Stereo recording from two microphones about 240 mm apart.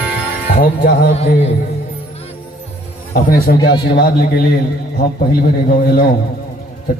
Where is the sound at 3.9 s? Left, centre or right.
Left.